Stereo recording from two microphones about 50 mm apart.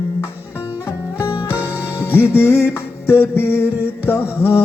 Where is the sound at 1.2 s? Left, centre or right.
Left.